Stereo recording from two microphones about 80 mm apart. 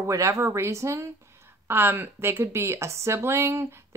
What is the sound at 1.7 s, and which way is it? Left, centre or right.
A woman's voice, right.